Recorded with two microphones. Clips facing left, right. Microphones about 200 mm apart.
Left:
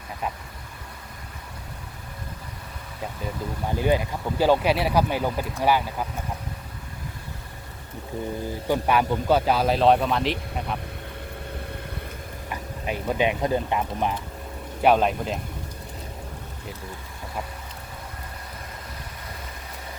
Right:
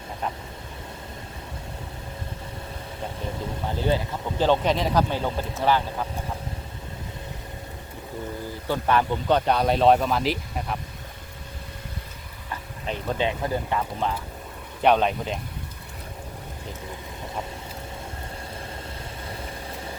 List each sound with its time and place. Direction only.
3.7 s speech: 15° left (ahead or behind)
8.6 s speech: 10° left (ahead or behind)
12.5 s speech: 10° left (ahead or behind)
14.8 s speech: 5° left (ahead or behind)